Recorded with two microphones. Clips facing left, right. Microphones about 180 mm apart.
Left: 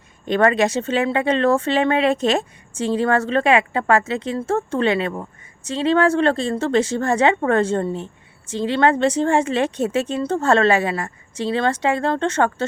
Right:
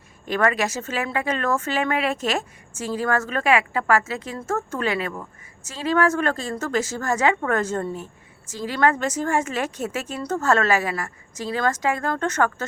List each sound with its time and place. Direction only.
0.3 s speech: 30° left (ahead or behind)